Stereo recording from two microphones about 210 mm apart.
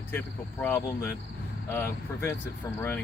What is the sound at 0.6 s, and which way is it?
Speech, 10° left (ahead or behind).